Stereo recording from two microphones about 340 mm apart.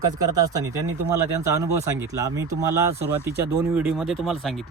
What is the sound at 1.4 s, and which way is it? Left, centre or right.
Speech, centre.